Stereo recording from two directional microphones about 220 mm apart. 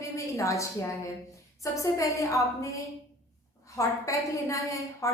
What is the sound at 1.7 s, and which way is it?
A woman's voice, 15° left (ahead or behind).